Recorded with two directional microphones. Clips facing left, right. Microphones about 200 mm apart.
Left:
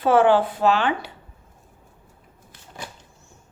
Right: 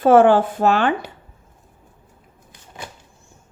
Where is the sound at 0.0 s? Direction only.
45° right (ahead or behind).